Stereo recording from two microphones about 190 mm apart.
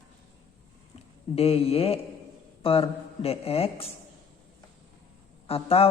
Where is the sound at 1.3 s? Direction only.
30° left (ahead or behind).